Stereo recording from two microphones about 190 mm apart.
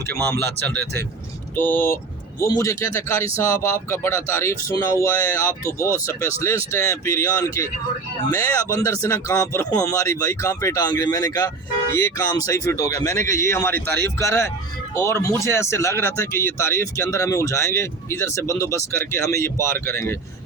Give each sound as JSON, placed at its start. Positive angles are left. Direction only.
{"t": 1.5, "sound": "speech", "side_deg": 10}